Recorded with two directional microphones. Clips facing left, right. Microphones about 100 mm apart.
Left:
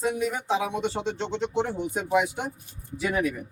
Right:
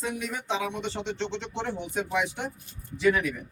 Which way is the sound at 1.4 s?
10° left (ahead or behind).